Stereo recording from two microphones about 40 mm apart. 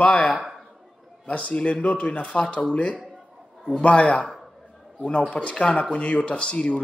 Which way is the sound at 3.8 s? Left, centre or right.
Left.